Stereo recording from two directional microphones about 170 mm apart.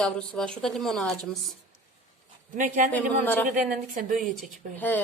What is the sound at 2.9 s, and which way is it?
Speech, 10° left (ahead or behind).